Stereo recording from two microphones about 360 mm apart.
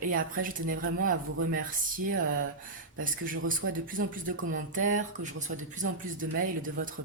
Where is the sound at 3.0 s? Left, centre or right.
Right.